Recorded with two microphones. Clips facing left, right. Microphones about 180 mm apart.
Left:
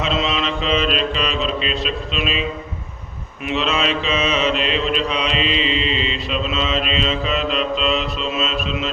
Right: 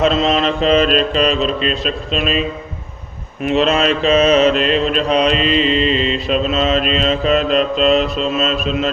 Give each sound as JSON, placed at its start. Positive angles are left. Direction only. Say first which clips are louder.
{"t": 0.0, "sound": "mantra", "louder": "right 7 dB", "side_deg": -45}
{"t": 3.4, "sound": "mantra", "louder": "right 6 dB", "side_deg": -45}